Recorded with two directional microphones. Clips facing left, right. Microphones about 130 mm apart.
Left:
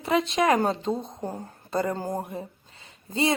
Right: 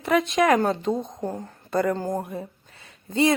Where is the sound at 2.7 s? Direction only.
30° left (ahead or behind).